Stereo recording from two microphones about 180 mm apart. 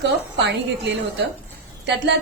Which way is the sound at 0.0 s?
75° right (ahead or behind).